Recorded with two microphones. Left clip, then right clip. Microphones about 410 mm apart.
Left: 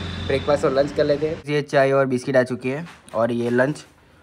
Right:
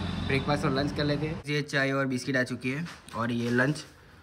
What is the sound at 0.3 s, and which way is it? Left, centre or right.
Speech, centre.